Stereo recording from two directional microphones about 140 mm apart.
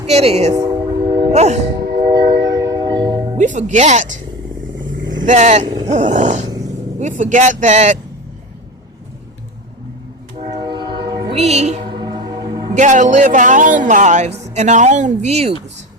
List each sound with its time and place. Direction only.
0.1 s speech: 50° right (ahead or behind)
0.5 s train: 25° right (ahead or behind)
1.3 s music: 55° right (ahead or behind)
2.0 s train: 25° right (ahead or behind)
3.3 s speech: 65° right (ahead or behind)
5.2 s speech: 60° right (ahead or behind)
5.8 s dog: 60° right (ahead or behind)
7.0 s speech: 65° right (ahead or behind)
10.5 s train: 30° right (ahead or behind)
11.3 s speech: 50° right (ahead or behind)
11.9 s music: 35° right (ahead or behind)
12.7 s speech: 60° right (ahead or behind)